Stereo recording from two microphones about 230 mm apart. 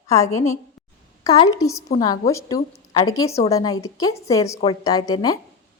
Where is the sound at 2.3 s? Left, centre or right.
Centre.